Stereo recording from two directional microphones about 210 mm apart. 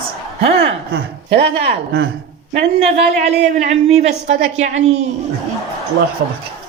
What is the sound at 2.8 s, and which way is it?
A woman's voice, 30° right (ahead or behind).